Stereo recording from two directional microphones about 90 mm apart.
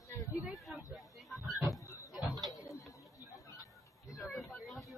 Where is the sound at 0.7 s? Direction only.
Centre (ahead or behind).